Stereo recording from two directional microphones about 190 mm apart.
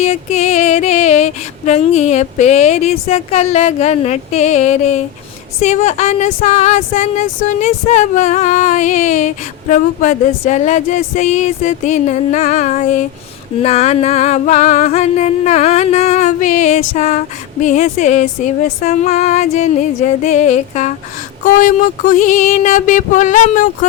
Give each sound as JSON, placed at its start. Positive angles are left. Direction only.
{"t": 0.0, "sound": "female singing", "side_deg": 35}
{"t": 3.1, "sound": "speech", "side_deg": 35}
{"t": 21.4, "sound": "a sound", "side_deg": 45}